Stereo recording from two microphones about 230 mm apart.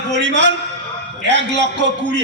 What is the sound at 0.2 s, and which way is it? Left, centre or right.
A man's voice, right.